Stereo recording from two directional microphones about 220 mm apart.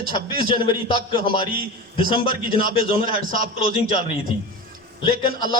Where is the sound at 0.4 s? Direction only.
25° left (ahead or behind).